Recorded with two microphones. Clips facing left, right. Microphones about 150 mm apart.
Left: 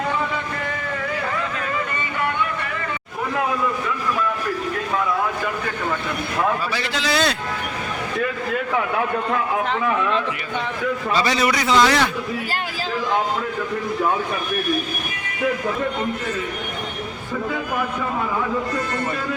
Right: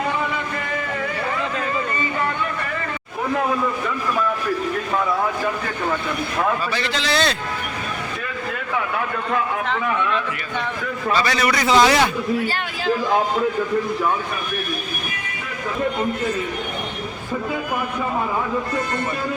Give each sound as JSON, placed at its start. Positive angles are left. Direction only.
{"t": 6.7, "sound": "a man's voice", "side_deg": 5}
{"t": 11.1, "sound": "a man's voice", "side_deg": 25}
{"t": 11.7, "sound": "a man's voice", "side_deg": -15}